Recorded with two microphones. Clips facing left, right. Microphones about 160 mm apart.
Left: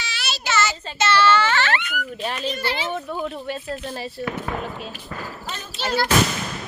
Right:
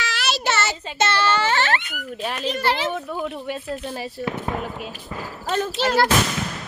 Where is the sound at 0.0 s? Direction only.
75° right (ahead or behind).